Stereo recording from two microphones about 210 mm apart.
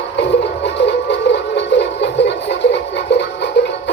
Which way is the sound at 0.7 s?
55° left (ahead or behind).